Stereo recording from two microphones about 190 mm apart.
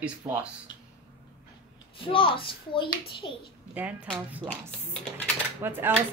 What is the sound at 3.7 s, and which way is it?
Speech, 10° right (ahead or behind).